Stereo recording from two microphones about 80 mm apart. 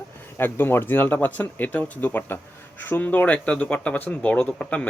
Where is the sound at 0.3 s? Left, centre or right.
Left.